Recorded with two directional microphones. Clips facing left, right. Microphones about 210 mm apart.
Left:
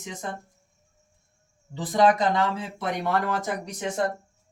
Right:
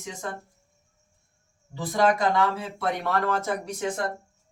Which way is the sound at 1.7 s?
20° left (ahead or behind).